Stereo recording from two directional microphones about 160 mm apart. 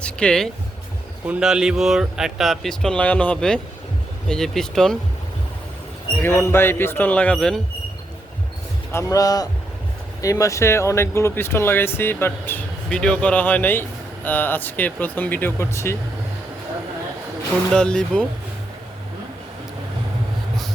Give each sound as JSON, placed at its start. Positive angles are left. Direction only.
{"t": 0.0, "sound": "speech", "side_deg": 5}
{"t": 6.2, "sound": "speech", "side_deg": 15}
{"t": 8.9, "sound": "speech", "side_deg": 20}
{"t": 17.7, "sound": "speech", "side_deg": 5}